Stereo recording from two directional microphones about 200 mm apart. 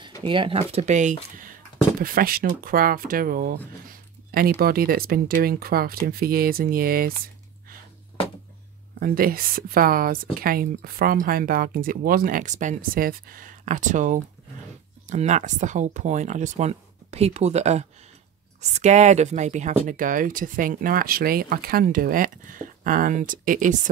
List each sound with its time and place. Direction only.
0.2 s speech: 25° right (ahead or behind); by 7.2 s 45° right (ahead or behind)
9.0 s speech: 50° right (ahead or behind)